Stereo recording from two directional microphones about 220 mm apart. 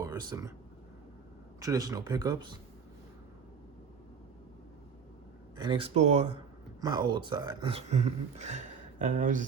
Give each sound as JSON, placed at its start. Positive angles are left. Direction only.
{"t": 0.0, "sound": "speech", "side_deg": -15}
{"t": 1.5, "sound": "speech", "side_deg": -15}
{"t": 5.5, "sound": "speech", "side_deg": -20}
{"t": 6.8, "sound": "speech", "side_deg": -20}